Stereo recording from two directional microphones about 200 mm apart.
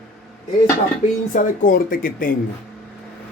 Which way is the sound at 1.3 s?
40° left (ahead or behind).